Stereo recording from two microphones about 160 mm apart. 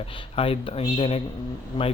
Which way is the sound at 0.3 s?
35° left (ahead or behind).